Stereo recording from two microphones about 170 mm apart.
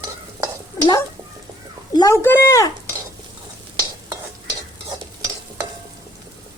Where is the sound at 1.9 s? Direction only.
20° left (ahead or behind).